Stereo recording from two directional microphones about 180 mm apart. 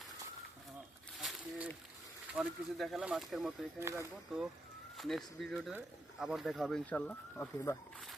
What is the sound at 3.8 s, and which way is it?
Speech, 15° right (ahead or behind).